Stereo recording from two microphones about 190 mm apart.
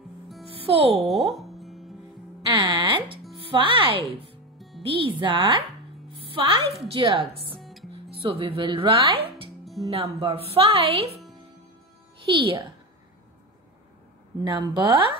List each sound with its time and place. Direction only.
0.7 s speech: 30° right (ahead or behind)
1.3 s music: centre (ahead or behind)
2.5 s music: 25° right (ahead or behind)
3.5 s speech: 25° right (ahead or behind)
4.6 s music: centre (ahead or behind)
4.8 s speech: 25° right (ahead or behind)
7.6 s music: centre (ahead or behind)
8.2 s a woman's voice: 25° right (ahead or behind)
12.3 s speech: 25° right (ahead or behind)
14.4 s speech: 25° right (ahead or behind)